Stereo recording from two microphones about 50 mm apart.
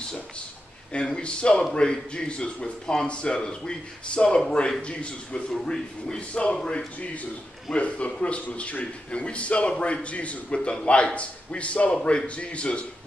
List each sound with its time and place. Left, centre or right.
0.9 s a man's voice: centre